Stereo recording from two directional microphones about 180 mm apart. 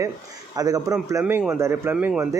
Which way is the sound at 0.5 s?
20° right (ahead or behind).